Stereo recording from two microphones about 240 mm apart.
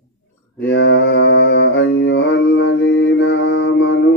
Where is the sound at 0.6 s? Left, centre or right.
Left.